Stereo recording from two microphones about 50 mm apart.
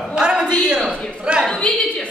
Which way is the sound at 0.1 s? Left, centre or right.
Centre.